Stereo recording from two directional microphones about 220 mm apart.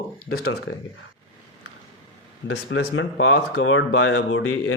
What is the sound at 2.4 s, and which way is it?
Speech, 50° left (ahead or behind).